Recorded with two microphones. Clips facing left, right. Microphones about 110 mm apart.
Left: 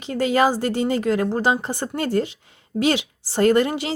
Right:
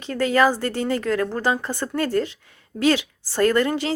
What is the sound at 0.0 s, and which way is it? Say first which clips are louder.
A woman's voice: even; 15° left (ahead or behind).